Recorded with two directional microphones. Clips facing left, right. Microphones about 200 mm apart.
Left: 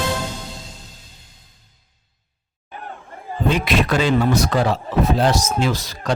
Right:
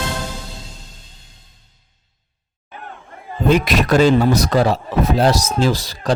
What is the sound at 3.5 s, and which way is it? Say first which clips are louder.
Speech: right 5 dB; 40° right (ahead or behind).